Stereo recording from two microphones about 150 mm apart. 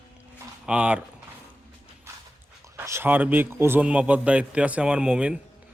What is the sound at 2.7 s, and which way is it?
A man's voice, 15° right (ahead or behind).